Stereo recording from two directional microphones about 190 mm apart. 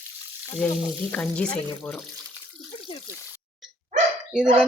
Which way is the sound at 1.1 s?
5° left (ahead or behind).